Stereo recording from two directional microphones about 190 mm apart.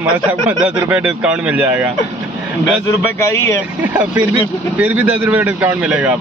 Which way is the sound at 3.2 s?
15° left (ahead or behind).